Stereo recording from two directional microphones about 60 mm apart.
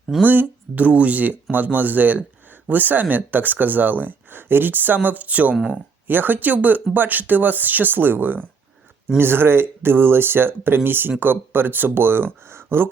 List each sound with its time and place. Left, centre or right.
0.3 s speech: right